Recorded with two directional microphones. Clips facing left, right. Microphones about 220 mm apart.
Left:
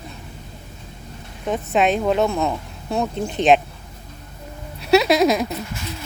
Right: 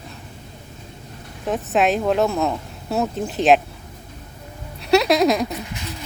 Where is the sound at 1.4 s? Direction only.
Centre (ahead or behind).